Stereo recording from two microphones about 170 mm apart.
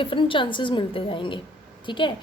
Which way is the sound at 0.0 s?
30° left (ahead or behind).